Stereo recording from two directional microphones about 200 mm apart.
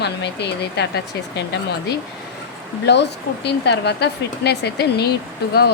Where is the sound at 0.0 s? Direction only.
55° left (ahead or behind).